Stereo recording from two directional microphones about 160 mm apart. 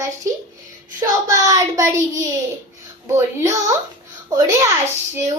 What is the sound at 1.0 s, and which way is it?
A child's voice, 20° right (ahead or behind).